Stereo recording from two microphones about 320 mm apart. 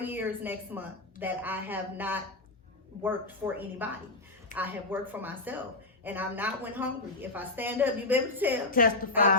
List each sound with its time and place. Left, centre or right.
0.0 s a woman's voice: centre
8.7 s a woman's voice: left